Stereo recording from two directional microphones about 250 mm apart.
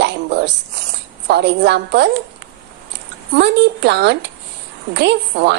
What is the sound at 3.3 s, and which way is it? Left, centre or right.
Speech, right.